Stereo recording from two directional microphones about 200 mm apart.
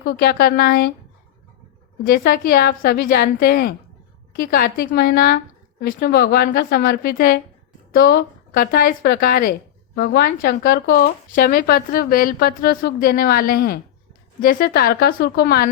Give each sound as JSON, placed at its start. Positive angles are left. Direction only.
{"t": 0.0, "sound": "speech", "side_deg": 50}
{"t": 2.0, "sound": "speech", "side_deg": 50}